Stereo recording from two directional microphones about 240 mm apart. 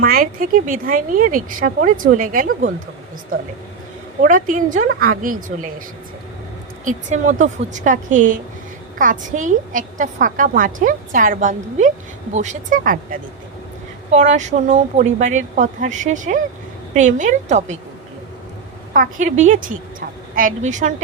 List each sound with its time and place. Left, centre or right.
0.0 s a woman's voice: right
4.2 s a woman's voice: right
6.8 s a woman's voice: right
18.9 s a woman's voice: right